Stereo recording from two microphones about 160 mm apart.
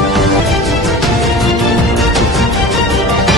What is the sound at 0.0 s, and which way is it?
Music, centre (ahead or behind).